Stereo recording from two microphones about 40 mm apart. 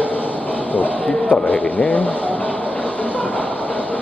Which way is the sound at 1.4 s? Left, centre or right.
Left.